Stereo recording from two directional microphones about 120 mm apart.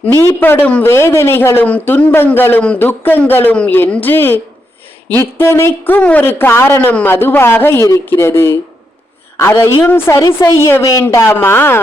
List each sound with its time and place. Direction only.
0.1 s a man's voice: 20° left (ahead or behind)
10.2 s a man's voice: 30° left (ahead or behind)